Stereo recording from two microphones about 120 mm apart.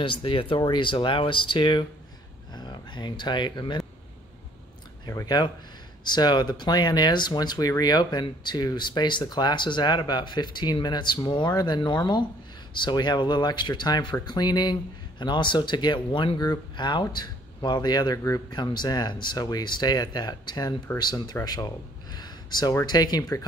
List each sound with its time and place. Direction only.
0.0 s speech: 45° left (ahead or behind)
5.0 s speech: 30° left (ahead or behind)